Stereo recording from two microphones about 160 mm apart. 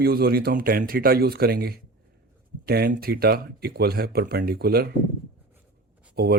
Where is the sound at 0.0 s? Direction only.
75° right (ahead or behind).